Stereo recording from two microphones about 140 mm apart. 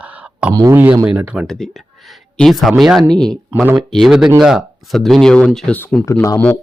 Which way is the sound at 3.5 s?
10° right (ahead or behind).